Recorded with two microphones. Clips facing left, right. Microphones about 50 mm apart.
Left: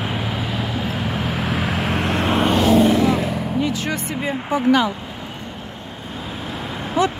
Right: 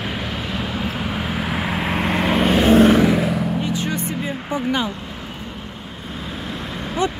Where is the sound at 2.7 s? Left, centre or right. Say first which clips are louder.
Right 4 dB; right.